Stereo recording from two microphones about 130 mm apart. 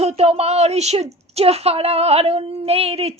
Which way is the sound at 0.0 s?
55° right (ahead or behind).